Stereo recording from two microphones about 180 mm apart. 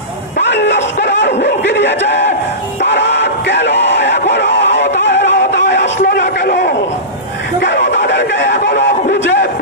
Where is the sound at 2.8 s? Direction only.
75° left (ahead or behind).